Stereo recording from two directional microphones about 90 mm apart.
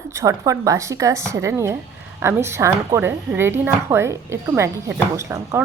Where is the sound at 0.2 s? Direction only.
35° right (ahead or behind).